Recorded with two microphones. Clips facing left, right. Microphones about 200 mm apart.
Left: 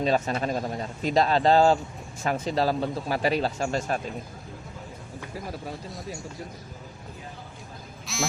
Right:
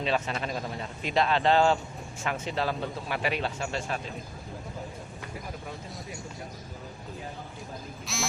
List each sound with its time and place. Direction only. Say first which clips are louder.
0.0 s speech: left 5 dB; 40° left (ahead or behind)
8.0 s quack: left 4 dB; centre (ahead or behind)